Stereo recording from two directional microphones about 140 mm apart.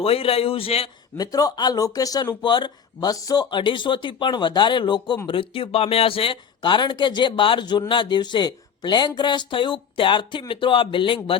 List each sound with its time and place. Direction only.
0.0 s a man's voice: 45° left (ahead or behind)
1.1 s speech: 25° left (ahead or behind)